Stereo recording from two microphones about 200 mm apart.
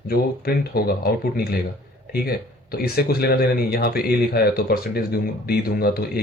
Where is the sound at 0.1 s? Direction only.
50° left (ahead or behind).